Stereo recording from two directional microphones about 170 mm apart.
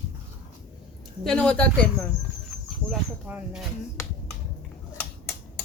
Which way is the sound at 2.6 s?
5° right (ahead or behind).